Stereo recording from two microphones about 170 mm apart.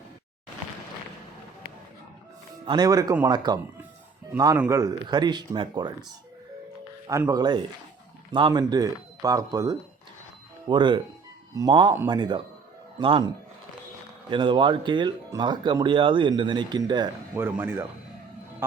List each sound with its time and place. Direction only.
2.6 s speech: 25° right (ahead or behind)
7.1 s a man's voice: 20° right (ahead or behind)
17.4 s speech: 15° right (ahead or behind)